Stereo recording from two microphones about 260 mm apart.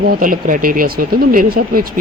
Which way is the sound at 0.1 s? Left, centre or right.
Right.